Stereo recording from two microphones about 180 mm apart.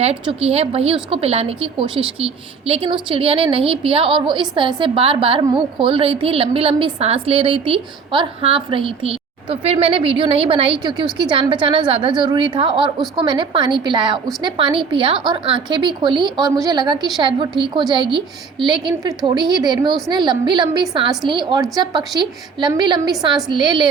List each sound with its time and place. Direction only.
0.3 s a woman's voice: 35° right (ahead or behind)